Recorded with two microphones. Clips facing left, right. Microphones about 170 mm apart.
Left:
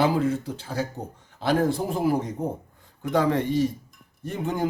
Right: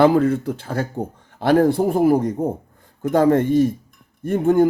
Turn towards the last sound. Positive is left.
turn(degrees=-50)  # may be behind; listen again after turning